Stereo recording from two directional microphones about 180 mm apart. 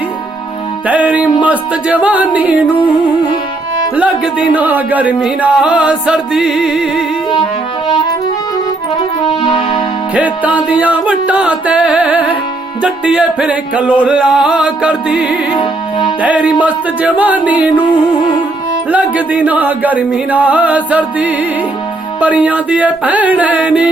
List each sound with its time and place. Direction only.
0.9 s music: 10° right (ahead or behind)
3.9 s music: 5° right (ahead or behind)
9.0 s music: 25° left (ahead or behind)
10.2 s music: 10° right (ahead or behind)
15.5 s music: 30° left (ahead or behind)
16.2 s music: 5° right (ahead or behind)
18.9 s music: 5° right (ahead or behind)